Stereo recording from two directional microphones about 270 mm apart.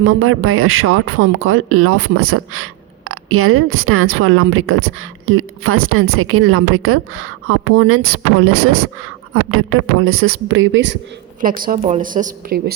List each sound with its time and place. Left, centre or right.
0.0 s speech: right
11.3 s a woman's voice: right